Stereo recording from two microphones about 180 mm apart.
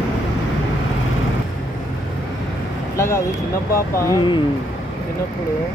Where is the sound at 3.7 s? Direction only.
15° left (ahead or behind).